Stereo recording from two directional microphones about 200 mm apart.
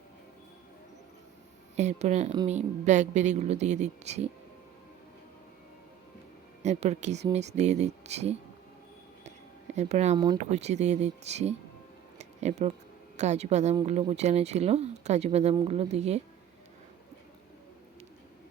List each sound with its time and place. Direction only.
1.7 s a woman's voice: 35° right (ahead or behind)
6.6 s a woman's voice: 35° right (ahead or behind)
9.7 s a woman's voice: 35° right (ahead or behind)